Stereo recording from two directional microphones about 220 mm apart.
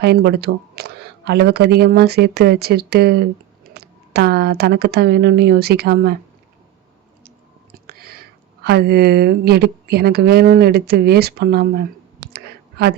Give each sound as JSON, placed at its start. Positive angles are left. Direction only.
{"t": 0.0, "sound": "speech", "side_deg": -45}
{"t": 7.7, "sound": "speech", "side_deg": -45}